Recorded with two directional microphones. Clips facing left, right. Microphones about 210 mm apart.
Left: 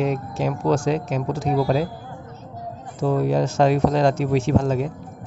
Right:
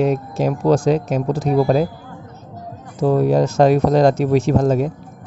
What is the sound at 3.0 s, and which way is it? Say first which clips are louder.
Speech: right 5 dB; 40° right (ahead or behind).